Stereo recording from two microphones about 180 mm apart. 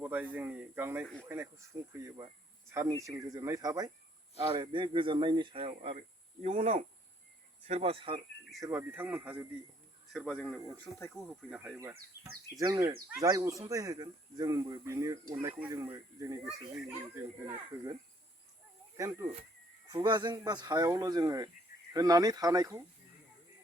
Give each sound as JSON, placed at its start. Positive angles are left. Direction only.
{"t": 0.0, "sound": "speech", "side_deg": -10}
{"t": 8.5, "sound": "speech", "side_deg": -15}
{"t": 10.1, "sound": "speech", "side_deg": 0}
{"t": 19.9, "sound": "speech", "side_deg": -25}